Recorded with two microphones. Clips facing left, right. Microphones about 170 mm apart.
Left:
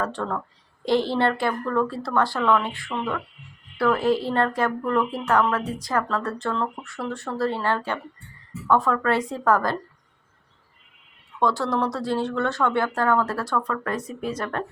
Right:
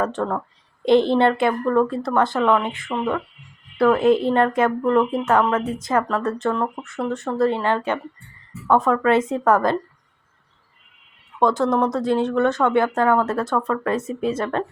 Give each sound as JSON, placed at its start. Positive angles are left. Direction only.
{"t": 0.0, "sound": "speech", "side_deg": -20}
{"t": 11.3, "sound": "speech", "side_deg": -20}